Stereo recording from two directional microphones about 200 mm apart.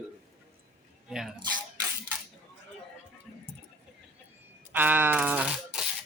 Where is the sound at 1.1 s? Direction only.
Centre (ahead or behind).